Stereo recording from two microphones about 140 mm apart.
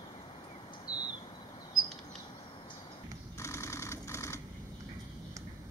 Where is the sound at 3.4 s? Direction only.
20° left (ahead or behind).